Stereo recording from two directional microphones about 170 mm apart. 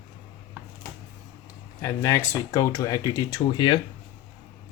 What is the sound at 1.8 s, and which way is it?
Speech, 15° left (ahead or behind).